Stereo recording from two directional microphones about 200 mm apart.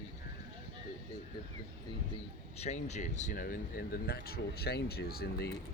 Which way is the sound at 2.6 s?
35° left (ahead or behind).